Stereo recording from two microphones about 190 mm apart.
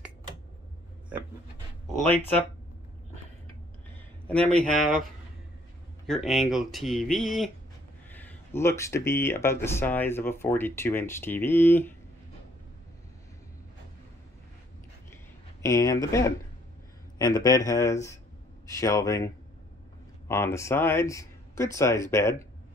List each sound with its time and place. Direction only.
4.3 s speech: 5° left (ahead or behind)
6.0 s speech: centre (ahead or behind)
15.6 s speech: 15° left (ahead or behind)